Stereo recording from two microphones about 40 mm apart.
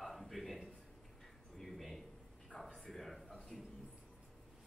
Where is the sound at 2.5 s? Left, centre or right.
Left.